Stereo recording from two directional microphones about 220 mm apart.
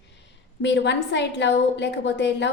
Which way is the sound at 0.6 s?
55° left (ahead or behind).